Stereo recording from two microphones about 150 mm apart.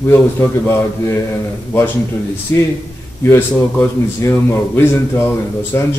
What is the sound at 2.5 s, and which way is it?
A man's voice, 15° left (ahead or behind).